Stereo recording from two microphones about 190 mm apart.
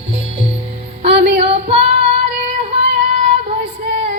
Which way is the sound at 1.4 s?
30° right (ahead or behind).